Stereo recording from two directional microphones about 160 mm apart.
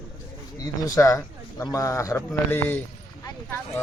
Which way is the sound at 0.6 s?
20° left (ahead or behind).